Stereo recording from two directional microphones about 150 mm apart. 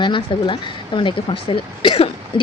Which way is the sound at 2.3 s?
35° left (ahead or behind).